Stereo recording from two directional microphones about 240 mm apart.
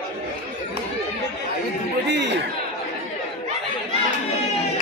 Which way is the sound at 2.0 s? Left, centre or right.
Right.